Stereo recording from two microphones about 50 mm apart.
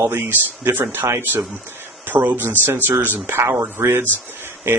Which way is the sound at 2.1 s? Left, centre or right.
Right.